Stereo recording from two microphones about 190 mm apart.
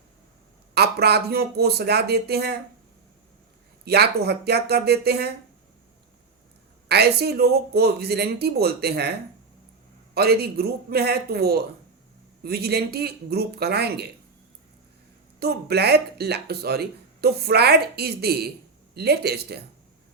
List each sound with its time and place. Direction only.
0.7 s speech: 60° right (ahead or behind)
3.8 s speech: 60° right (ahead or behind)
6.8 s speech: 60° right (ahead or behind)
10.2 s speech: 55° right (ahead or behind)
15.4 s speech: 60° right (ahead or behind)